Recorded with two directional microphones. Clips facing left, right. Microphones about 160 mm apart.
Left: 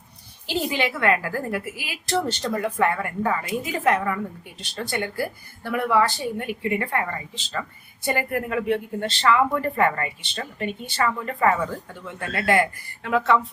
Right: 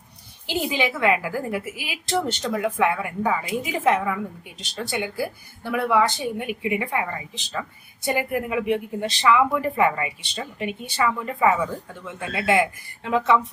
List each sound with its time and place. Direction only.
0.4 s a woman's voice: 15° right (ahead or behind)
2.4 s a woman's voice: 5° right (ahead or behind)